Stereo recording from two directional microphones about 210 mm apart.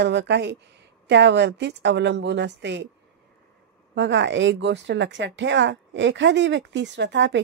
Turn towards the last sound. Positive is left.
turn(degrees=-55)  # may be behind; listen again after turning